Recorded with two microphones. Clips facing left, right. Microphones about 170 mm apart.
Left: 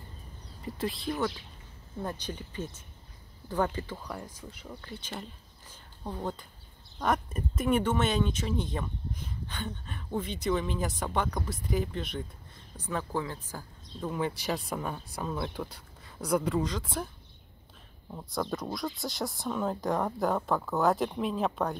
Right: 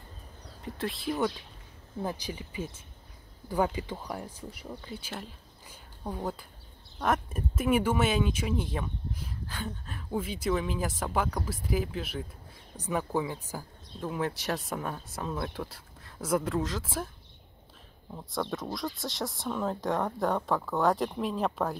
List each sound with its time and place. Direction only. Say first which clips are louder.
0.6 s speech: left 1 dB; centre (ahead or behind)
5.7 s a sound: right 1 dB; 10° right (ahead or behind)
7.0 s speech: even; 5° right (ahead or behind)
18.1 s speech: even; centre (ahead or behind)